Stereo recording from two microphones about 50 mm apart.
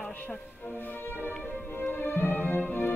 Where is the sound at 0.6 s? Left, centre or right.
Left.